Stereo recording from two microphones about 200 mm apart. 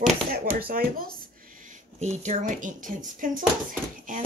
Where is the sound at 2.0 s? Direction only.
35° right (ahead or behind).